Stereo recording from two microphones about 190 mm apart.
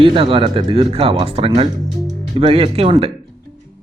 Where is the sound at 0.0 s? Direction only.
30° right (ahead or behind).